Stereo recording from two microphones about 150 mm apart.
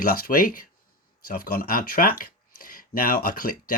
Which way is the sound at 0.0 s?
75° left (ahead or behind).